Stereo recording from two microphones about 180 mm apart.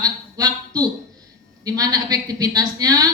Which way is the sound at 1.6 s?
20° right (ahead or behind).